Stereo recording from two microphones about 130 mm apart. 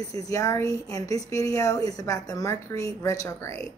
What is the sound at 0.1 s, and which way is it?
A woman's voice, 25° left (ahead or behind).